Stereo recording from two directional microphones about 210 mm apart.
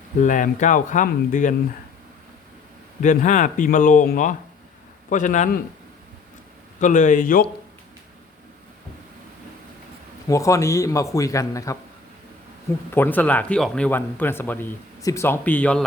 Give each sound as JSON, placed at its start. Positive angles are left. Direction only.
{"t": 0.2, "sound": "speech", "side_deg": 35}
{"t": 3.0, "sound": "speech", "side_deg": 35}
{"t": 6.7, "sound": "speech", "side_deg": 35}
{"t": 10.2, "sound": "speech", "side_deg": 15}
{"t": 12.9, "sound": "speech", "side_deg": 10}